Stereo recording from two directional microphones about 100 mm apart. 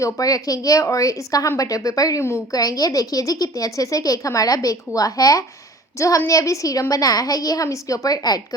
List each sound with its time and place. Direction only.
0.0 s a woman's voice: 35° left (ahead or behind)